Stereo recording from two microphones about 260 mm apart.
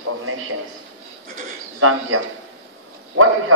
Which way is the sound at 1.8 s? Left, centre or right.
Right.